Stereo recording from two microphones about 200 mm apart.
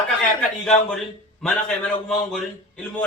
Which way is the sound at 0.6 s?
Centre (ahead or behind).